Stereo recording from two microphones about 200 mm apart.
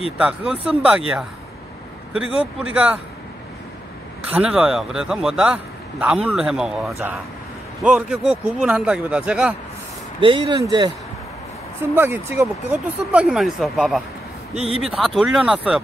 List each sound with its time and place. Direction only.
0.2 s a man's voice: 5° right (ahead or behind)
2.1 s speech: 5° right (ahead or behind)
4.3 s a man's voice: 5° right (ahead or behind)
10.2 s speech: 25° right (ahead or behind)
11.9 s a man's voice: 10° right (ahead or behind)